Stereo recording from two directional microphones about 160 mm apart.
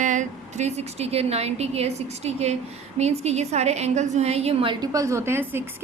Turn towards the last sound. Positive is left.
turn(degrees=-15)  # may be behind; listen again after turning